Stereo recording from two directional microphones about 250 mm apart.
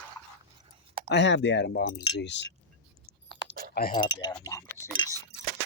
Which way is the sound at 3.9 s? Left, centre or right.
Centre.